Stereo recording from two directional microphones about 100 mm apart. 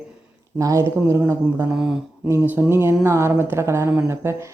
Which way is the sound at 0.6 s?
30° right (ahead or behind).